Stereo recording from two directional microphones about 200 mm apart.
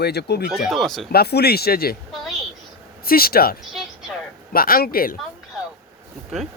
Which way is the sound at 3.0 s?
50° left (ahead or behind).